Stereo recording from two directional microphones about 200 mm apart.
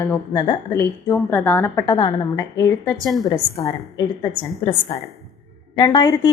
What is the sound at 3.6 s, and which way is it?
A woman's voice, 20° left (ahead or behind).